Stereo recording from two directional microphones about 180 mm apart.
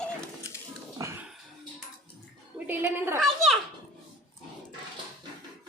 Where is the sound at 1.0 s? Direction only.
15° right (ahead or behind).